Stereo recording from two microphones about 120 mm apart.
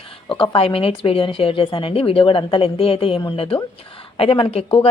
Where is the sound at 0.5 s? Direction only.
50° left (ahead or behind).